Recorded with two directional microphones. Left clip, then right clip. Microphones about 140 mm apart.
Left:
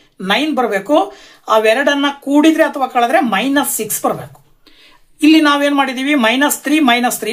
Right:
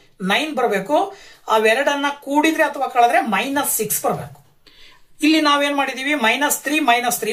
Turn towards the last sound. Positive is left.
turn(degrees=50)  # may be behind; listen again after turning